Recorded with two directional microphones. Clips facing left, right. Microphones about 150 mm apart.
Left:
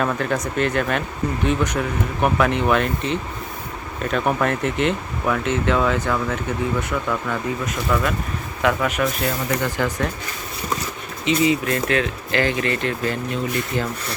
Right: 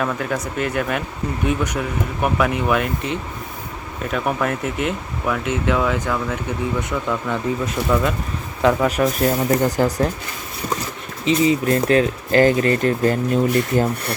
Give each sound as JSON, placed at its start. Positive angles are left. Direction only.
{"t": 0.2, "sound": "speech", "side_deg": -10}
{"t": 8.6, "sound": "speech", "side_deg": -30}
{"t": 11.3, "sound": "speech", "side_deg": -35}